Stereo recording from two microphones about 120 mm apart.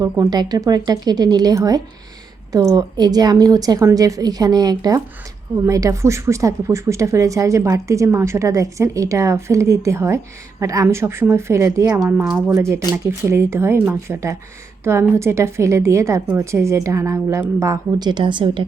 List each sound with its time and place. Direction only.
0.0 s a woman's voice: 30° right (ahead or behind)